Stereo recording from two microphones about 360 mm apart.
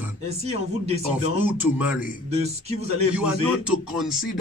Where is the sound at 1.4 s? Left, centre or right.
Centre.